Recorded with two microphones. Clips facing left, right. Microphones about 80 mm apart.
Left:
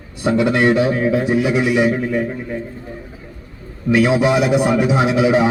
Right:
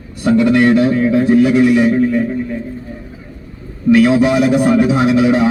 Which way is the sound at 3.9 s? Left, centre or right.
Centre.